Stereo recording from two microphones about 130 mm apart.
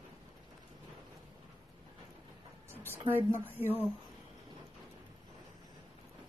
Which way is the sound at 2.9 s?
15° right (ahead or behind).